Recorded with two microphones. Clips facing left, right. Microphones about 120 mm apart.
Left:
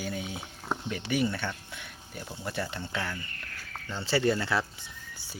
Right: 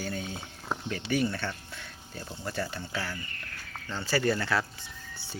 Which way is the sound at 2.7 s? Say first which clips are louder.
Left 1 dB; 10° right (ahead or behind).